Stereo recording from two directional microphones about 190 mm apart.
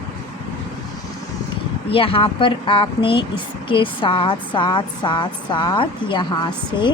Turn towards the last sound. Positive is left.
turn(degrees=20)  # may be behind; listen again after turning